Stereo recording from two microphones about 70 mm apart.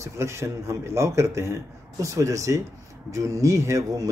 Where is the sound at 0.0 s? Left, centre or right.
Right.